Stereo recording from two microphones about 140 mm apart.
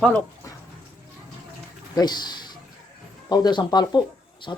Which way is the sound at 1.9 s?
30° left (ahead or behind).